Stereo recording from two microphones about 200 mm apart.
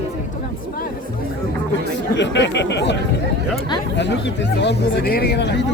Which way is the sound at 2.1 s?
60° left (ahead or behind).